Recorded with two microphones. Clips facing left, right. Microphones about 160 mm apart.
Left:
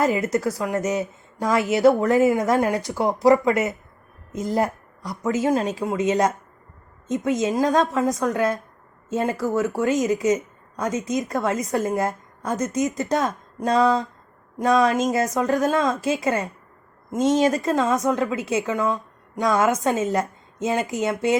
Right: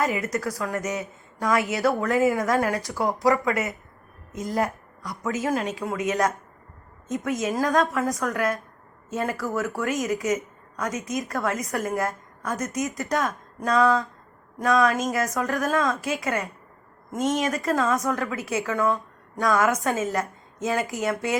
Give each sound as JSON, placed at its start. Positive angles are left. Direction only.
{"t": 0.0, "sound": "a woman's voice", "side_deg": 25}